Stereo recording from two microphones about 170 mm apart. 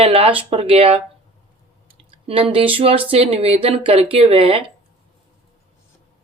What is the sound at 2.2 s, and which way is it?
Speech, 35° right (ahead or behind).